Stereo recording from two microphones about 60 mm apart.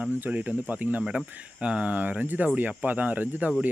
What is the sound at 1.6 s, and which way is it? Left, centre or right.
Speech, centre.